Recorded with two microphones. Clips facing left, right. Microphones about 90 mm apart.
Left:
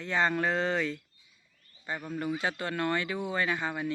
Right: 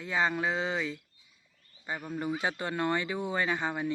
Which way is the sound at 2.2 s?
20° right (ahead or behind).